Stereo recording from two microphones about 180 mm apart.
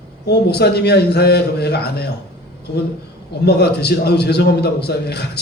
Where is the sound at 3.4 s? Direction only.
65° left (ahead or behind).